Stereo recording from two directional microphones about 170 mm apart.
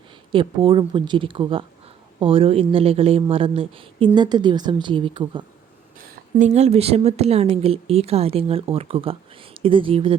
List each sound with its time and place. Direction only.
0.3 s speech: 30° right (ahead or behind)
6.4 s speech: 40° right (ahead or behind)